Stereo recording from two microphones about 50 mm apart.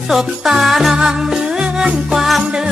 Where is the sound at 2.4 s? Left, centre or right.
Centre.